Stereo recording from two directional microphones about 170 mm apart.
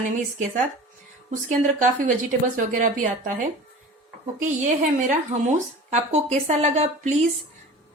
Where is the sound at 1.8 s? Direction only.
50° right (ahead or behind).